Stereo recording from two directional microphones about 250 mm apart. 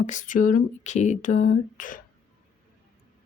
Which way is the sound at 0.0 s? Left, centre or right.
Left.